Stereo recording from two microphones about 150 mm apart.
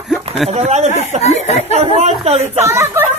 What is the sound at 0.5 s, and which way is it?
Speech, 50° right (ahead or behind).